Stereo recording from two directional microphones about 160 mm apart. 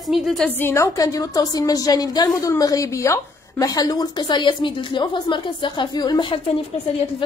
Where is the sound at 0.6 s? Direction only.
15° left (ahead or behind).